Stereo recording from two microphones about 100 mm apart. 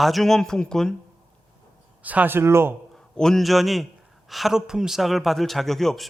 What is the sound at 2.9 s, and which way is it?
A man's voice, 5° left (ahead or behind).